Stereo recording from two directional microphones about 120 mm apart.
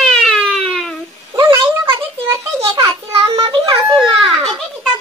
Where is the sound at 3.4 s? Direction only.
45° right (ahead or behind).